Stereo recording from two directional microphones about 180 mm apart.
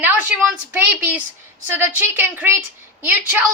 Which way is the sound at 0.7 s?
5° right (ahead or behind).